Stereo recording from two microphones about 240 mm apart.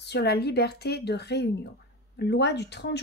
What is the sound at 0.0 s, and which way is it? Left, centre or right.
A woman's voice, left.